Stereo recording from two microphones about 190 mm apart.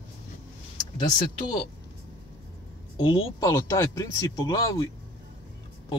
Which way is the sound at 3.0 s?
20° left (ahead or behind).